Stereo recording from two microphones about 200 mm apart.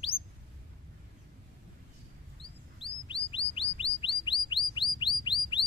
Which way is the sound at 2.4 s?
25° left (ahead or behind).